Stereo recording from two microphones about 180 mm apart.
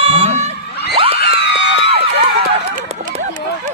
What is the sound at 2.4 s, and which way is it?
Run, 40° right (ahead or behind).